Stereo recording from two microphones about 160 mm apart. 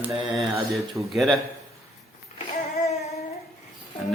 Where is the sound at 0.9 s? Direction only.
Centre (ahead or behind).